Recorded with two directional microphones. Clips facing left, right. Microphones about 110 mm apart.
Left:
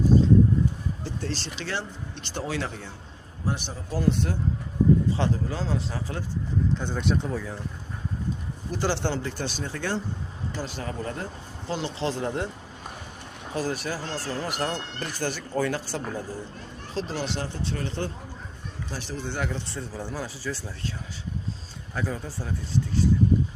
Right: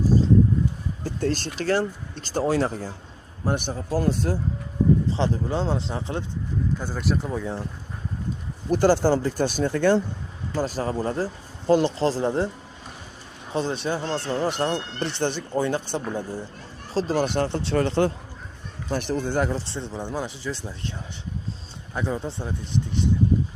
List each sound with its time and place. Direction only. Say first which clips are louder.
1.0 s speech: right 10 dB; 50° right (ahead or behind)
3.4 s speech: right 5 dB; 50° right (ahead or behind)
4.1 s speech: right 2 dB; 35° right (ahead or behind)
6.7 s speech: even; 5° right (ahead or behind)
7.3 s speech: right 4 dB; 25° right (ahead or behind)
8.7 s speech: right 9 dB; 45° right (ahead or behind)
10.6 s speech: right 9 dB; 40° right (ahead or behind)
11.7 s speech: right 9 dB; 45° right (ahead or behind)
13.5 s speech: right 4 dB; 25° right (ahead or behind)
16.9 s speech: right 7 dB; 40° right (ahead or behind); by 18.1 s 80° right
18.9 s speech: right 9 dB; 55° right (ahead or behind); by 20.9 s 20° right (ahead or behind)
21.9 s speech: right 4 dB; 20° right (ahead or behind)